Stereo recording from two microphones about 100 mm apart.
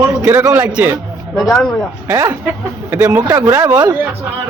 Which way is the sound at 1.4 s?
5° left (ahead or behind).